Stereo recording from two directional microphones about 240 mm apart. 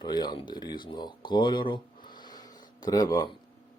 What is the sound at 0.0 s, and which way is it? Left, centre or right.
Speech, centre.